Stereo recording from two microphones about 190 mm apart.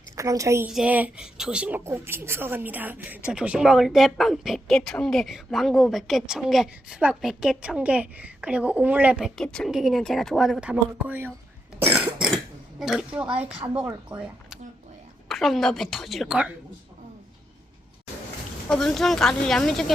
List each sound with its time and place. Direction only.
0.2 s a woman's voice: 15° right (ahead or behind)
12.8 s a woman's voice: 5° right (ahead or behind)
14.1 s speech: 25° right (ahead or behind)
15.3 s a woman's voice: centre (ahead or behind)
18.7 s a woman's voice: 5° left (ahead or behind)